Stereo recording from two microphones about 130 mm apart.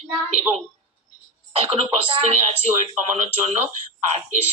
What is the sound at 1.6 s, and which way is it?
Speech, 50° right (ahead or behind).